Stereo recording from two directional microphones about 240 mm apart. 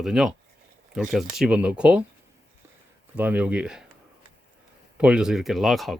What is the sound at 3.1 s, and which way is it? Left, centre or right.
Speech, centre.